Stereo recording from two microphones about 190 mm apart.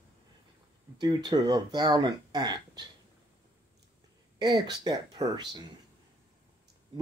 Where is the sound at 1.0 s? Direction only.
20° right (ahead or behind).